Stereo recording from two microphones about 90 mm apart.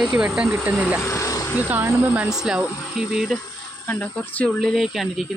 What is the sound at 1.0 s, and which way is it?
Speech, 35° left (ahead or behind).